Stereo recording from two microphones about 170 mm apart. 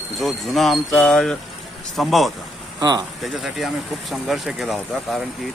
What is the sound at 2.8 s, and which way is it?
Speech, 25° right (ahead or behind).